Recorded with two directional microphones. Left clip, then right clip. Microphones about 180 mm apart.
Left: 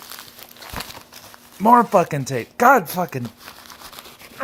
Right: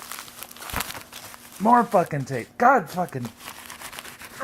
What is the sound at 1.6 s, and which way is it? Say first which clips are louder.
Speech: left 4 dB; 30° left (ahead or behind).